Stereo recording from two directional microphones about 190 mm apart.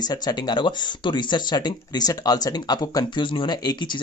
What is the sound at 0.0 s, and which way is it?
Speech, 20° left (ahead or behind).